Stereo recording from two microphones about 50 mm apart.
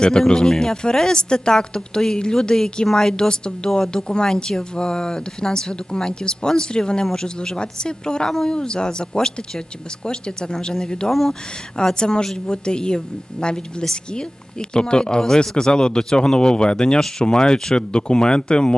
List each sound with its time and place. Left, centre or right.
0.0 s speech: centre
11.1 s speech: centre
11.9 s speech: centre